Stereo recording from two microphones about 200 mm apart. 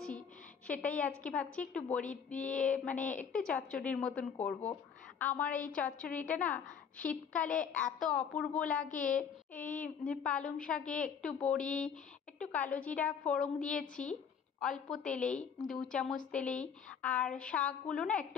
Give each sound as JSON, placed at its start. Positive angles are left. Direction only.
{"t": 0.7, "sound": "a woman's voice", "side_deg": 5}
{"t": 8.8, "sound": "a woman's voice", "side_deg": 40}
{"t": 9.5, "sound": "a woman's voice", "side_deg": 10}